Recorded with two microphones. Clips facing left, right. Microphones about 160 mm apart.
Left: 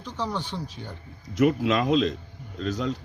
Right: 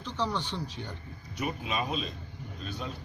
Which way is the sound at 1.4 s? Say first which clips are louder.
Left 11 dB; 90° left.